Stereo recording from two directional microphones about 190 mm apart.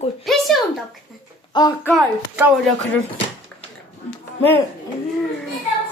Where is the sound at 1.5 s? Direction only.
25° left (ahead or behind).